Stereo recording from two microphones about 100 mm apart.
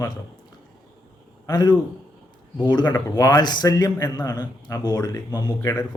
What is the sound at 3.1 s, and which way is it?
A man's voice, 40° left (ahead or behind).